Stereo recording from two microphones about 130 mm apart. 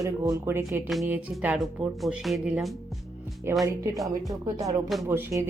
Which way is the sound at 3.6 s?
25° right (ahead or behind).